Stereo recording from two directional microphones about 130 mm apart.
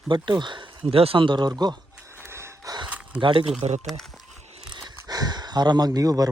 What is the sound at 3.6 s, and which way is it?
Speech, 60° right (ahead or behind).